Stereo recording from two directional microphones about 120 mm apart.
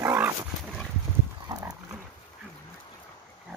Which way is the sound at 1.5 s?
30° right (ahead or behind).